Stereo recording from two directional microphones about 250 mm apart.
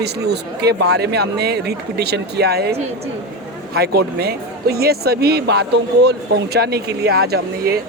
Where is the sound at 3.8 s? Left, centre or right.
Right.